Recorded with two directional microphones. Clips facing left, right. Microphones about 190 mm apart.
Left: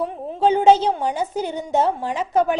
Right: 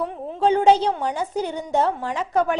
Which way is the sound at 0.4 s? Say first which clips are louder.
Left 2 dB; 25° left (ahead or behind).